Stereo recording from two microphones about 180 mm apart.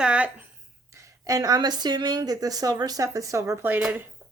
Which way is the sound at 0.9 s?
20° right (ahead or behind).